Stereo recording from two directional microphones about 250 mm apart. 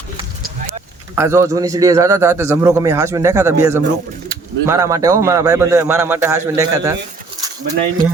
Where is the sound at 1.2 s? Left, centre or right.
Centre.